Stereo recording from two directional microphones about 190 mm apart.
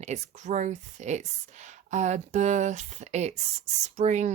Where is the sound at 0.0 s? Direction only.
35° right (ahead or behind).